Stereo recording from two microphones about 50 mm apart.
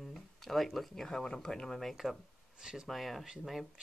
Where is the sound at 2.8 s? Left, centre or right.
Centre.